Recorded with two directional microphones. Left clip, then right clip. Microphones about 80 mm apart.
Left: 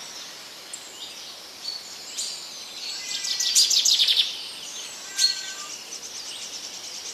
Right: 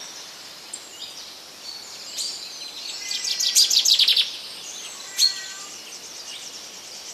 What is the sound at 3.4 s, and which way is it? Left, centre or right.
Bird vocalization, centre.